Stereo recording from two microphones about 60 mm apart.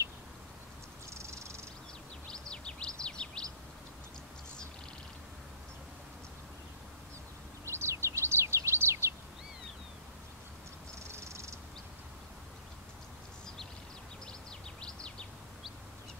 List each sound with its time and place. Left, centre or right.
1.1 s a sound: right
2.2 s bird vocalization: centre
7.6 s bird: right
11.1 s cat: right
14.8 s bird: centre